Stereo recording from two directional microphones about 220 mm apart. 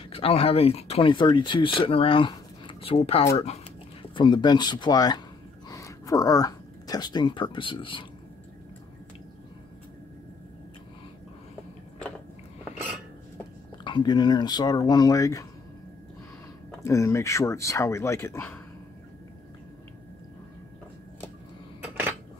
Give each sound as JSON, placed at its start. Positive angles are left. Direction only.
{"t": 0.1, "sound": "speech", "side_deg": 25}
{"t": 13.8, "sound": "speech", "side_deg": 20}
{"t": 16.8, "sound": "speech", "side_deg": 15}